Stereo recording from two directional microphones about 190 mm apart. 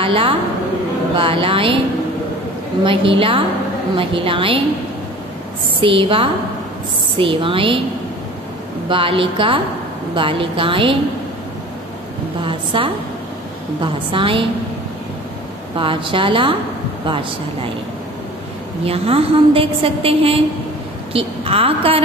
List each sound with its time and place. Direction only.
0.0 s a woman's voice: 30° right (ahead or behind)
2.8 s a woman's voice: 30° right (ahead or behind)
5.8 s a woman's voice: 25° right (ahead or behind)
8.8 s a woman's voice: 30° right (ahead or behind)
12.4 s a woman's voice: 25° right (ahead or behind)
15.8 s a woman's voice: 25° right (ahead or behind)
18.9 s a woman's voice: 30° right (ahead or behind)